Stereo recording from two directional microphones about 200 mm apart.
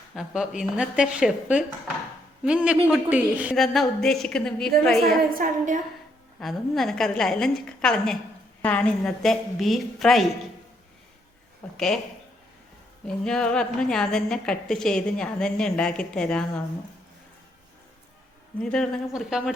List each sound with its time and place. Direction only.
0.1 s a woman's voice: centre (ahead or behind)
5.3 s a woman's voice: 40° right (ahead or behind)
6.4 s a woman's voice: centre (ahead or behind)
11.6 s a woman's voice: 5° left (ahead or behind)
13.1 s a woman's voice: 5° left (ahead or behind)
18.6 s a woman's voice: 5° left (ahead or behind)